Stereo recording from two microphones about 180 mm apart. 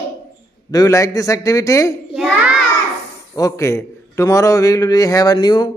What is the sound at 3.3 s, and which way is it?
A man's voice, 15° left (ahead or behind).